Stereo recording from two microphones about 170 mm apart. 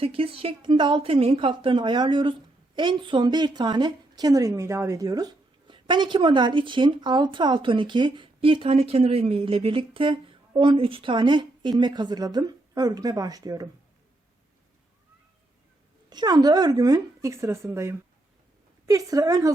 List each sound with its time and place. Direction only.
0.0 s a woman's voice: 35° right (ahead or behind)
16.0 s a woman's voice: 25° right (ahead or behind)